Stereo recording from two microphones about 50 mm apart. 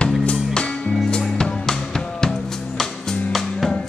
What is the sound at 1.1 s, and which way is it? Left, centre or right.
Music, centre.